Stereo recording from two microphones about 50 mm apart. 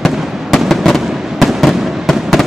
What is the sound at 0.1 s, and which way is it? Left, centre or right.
Fireworks, centre.